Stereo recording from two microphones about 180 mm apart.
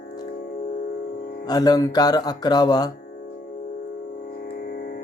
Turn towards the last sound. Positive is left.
turn(degrees=60)  # may be behind; listen again after turning